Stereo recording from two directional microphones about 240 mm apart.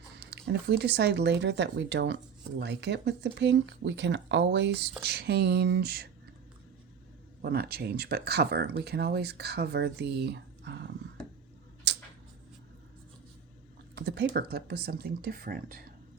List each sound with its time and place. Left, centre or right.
0.2 s speech: right
7.4 s speech: right
11.9 s a sound: right
13.9 s speech: right